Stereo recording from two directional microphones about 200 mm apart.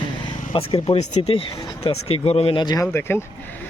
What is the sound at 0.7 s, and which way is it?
Speech, 30° left (ahead or behind).